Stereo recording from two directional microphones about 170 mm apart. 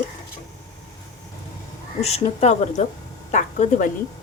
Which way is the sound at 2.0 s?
40° left (ahead or behind).